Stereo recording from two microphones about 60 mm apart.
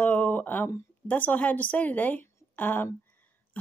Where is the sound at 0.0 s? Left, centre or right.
Left.